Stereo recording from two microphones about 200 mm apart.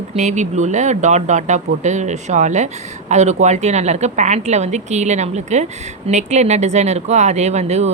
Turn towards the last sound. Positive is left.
turn(degrees=-35)  # may be behind; listen again after turning